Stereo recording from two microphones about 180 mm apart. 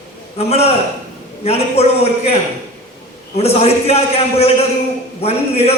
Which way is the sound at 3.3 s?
35° left (ahead or behind).